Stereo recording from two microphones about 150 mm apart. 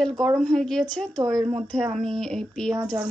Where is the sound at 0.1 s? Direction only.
20° right (ahead or behind).